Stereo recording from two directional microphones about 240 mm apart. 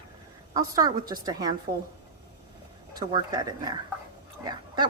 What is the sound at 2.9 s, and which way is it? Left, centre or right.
A woman's voice, centre.